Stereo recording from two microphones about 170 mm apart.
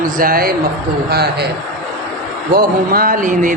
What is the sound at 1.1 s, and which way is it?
Speech, 70° right (ahead or behind).